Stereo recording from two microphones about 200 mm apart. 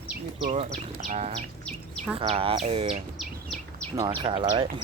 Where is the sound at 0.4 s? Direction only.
35° right (ahead or behind).